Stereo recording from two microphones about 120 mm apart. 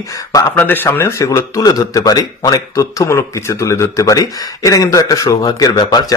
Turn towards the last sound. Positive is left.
turn(degrees=35)  # may be behind; listen again after turning